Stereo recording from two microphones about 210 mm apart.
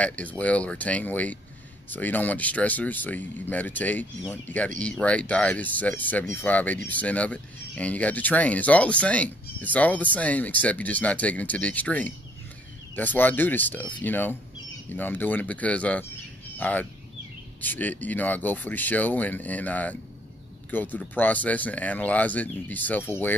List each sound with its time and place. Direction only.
0.0 s speech: 5° left (ahead or behind)